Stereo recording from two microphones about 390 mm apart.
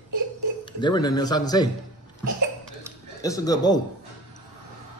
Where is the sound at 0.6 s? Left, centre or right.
Centre.